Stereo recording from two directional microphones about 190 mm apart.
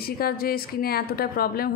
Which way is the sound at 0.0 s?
50° left (ahead or behind).